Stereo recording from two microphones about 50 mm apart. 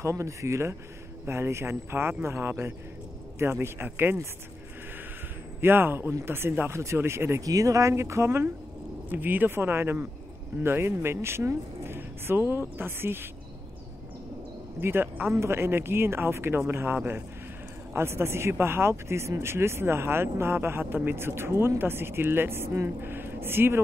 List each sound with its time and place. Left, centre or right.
0.0 s speech: right
1.2 s speech: right
5.6 s speech: right
6.7 s speech: right
9.1 s speech: right
9.5 s speech: right
14.8 s speech: right
15.2 s speech: right
17.9 s speech: right